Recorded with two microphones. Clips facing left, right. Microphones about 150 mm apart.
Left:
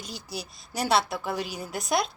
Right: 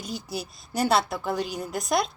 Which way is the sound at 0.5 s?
Centre (ahead or behind).